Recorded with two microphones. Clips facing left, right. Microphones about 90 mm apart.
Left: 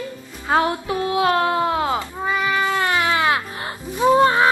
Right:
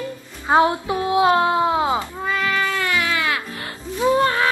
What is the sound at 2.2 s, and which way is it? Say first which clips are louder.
Cat: left 1 dB; 15° left (ahead or behind).